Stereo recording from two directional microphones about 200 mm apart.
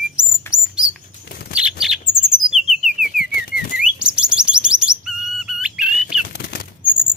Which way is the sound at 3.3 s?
50° left (ahead or behind).